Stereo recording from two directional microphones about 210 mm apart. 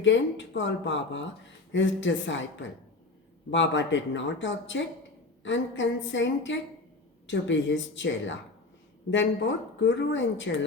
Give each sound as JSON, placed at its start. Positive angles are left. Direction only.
{"t": 0.0, "sound": "speech", "side_deg": 60}